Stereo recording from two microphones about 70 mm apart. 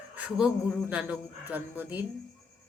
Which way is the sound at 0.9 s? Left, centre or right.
Centre.